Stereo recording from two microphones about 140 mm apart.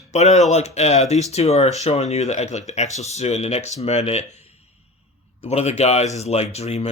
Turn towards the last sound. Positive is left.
turn(degrees=50)  # may be behind; listen again after turning